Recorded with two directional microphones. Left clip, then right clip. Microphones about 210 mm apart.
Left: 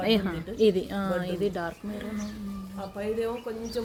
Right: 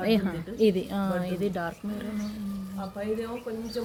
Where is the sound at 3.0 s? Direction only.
55° left (ahead or behind).